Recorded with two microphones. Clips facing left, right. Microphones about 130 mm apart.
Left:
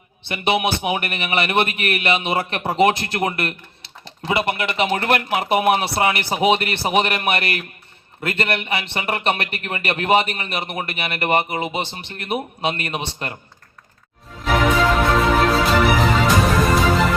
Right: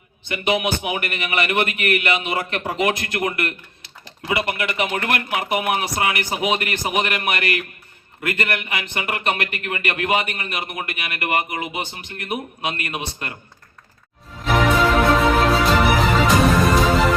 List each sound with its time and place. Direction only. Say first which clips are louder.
0.3 s a man's voice: left 1 dB; 30° left (ahead or behind)
14.4 s music: even; centre (ahead or behind)